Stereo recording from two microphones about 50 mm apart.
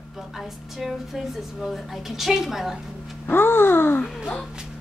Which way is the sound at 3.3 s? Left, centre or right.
Left.